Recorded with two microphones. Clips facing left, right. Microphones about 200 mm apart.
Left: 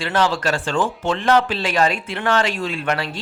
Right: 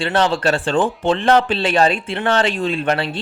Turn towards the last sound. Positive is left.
turn(degrees=-30)  # may be behind; listen again after turning